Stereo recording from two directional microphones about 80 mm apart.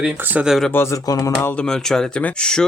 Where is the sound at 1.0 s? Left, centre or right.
Left.